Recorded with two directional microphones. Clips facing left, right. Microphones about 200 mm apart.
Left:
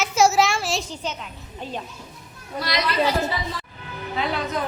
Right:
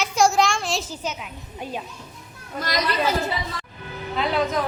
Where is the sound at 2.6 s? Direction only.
45° right (ahead or behind).